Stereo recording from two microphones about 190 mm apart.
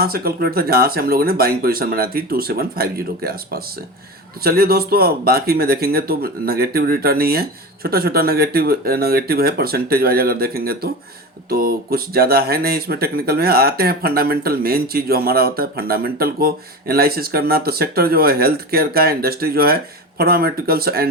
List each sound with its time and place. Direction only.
0.0 s speech: 55° right (ahead or behind)